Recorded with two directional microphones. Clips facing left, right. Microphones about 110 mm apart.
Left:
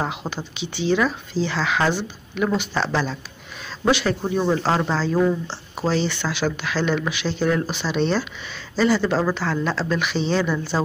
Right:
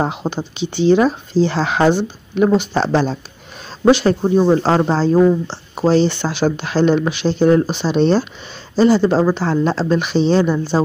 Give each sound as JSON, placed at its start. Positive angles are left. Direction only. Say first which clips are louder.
{"t": 0.0, "sound": "speech", "louder": "right 7 dB", "side_deg": -35}
{"t": 1.8, "sound": "speech", "louder": "right 7 dB", "side_deg": -30}
{"t": 4.2, "sound": "speech", "louder": "right 8 dB", "side_deg": -20}
{"t": 4.6, "sound": "speech", "louder": "right 6 dB", "side_deg": -35}